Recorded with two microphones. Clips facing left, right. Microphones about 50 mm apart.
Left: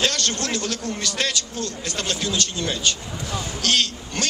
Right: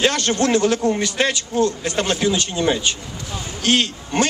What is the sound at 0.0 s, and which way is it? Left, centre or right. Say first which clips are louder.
A man's voice: right 6 dB; right.